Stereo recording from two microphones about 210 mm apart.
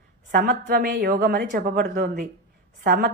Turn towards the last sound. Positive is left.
turn(degrees=-50)  # may be behind; listen again after turning